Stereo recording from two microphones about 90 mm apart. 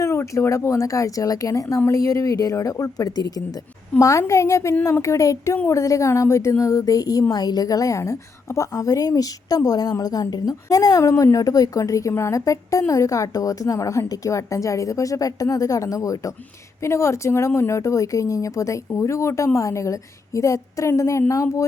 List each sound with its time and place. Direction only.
0.0 s speech: 35° left (ahead or behind)